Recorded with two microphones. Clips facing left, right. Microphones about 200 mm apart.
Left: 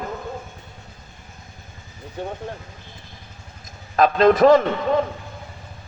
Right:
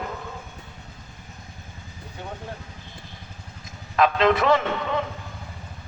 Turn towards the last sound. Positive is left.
turn(degrees=40)  # may be behind; listen again after turning